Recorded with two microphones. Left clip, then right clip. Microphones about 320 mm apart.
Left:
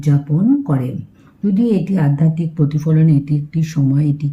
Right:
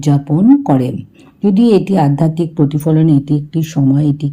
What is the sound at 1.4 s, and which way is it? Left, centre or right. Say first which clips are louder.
A woman's voice: right 7 dB; centre.